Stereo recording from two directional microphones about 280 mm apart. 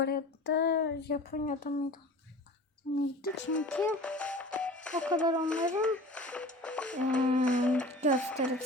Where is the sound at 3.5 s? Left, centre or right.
Centre.